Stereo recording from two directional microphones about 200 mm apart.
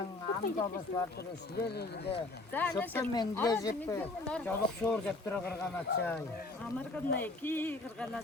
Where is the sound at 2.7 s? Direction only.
10° left (ahead or behind).